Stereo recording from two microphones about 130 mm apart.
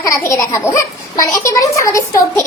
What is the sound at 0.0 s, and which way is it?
A child's voice, 25° left (ahead or behind).